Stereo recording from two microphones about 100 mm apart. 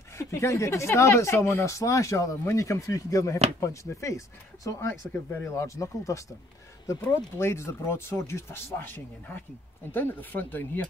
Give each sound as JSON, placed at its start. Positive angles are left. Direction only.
{"t": 0.2, "sound": "speech", "side_deg": 30}